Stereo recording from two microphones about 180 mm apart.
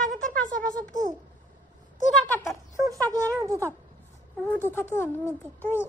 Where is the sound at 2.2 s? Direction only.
15° left (ahead or behind).